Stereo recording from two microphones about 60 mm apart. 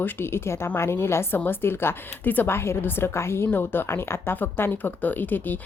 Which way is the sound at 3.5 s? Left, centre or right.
Left.